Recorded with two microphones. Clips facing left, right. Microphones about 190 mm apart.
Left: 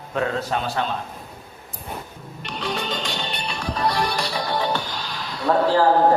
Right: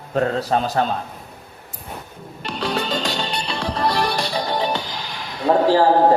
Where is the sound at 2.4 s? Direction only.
35° right (ahead or behind).